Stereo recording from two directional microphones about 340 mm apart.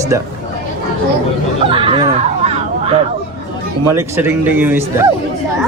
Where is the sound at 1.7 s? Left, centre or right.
Centre.